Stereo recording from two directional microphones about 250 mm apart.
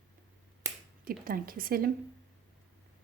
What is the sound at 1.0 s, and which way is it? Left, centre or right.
Speech, right.